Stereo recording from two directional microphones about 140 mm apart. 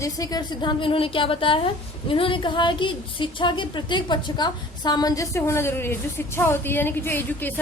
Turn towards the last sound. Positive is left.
turn(degrees=15)  # may be behind; listen again after turning